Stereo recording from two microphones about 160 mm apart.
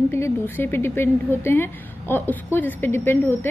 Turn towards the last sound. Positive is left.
turn(degrees=15)  # may be behind; listen again after turning